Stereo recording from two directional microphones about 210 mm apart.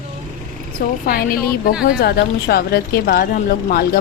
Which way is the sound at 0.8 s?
40° left (ahead or behind).